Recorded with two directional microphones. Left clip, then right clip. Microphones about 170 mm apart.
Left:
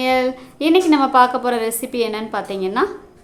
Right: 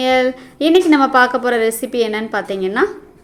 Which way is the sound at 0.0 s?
15° right (ahead or behind).